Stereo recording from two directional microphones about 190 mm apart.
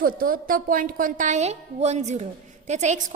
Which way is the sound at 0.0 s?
50° right (ahead or behind).